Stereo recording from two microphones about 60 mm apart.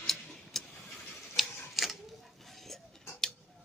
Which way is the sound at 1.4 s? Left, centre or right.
Centre.